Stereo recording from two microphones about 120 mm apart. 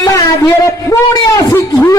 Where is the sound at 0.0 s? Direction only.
30° left (ahead or behind).